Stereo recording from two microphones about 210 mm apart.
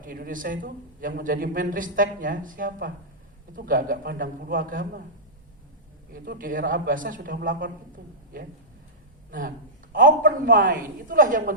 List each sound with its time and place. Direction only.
0.0 s a man's voice: 40° right (ahead or behind)
6.1 s a man's voice: 40° right (ahead or behind)